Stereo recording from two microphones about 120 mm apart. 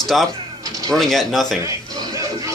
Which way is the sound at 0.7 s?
30° right (ahead or behind).